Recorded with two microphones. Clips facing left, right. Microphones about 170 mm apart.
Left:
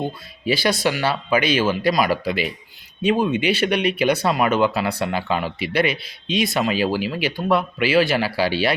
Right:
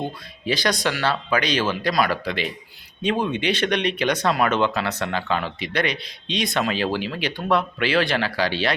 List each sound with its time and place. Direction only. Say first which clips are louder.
0.4 s speech: left 3 dB; 5° left (ahead or behind)